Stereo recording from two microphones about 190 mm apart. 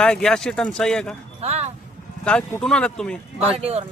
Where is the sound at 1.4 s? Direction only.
35° right (ahead or behind).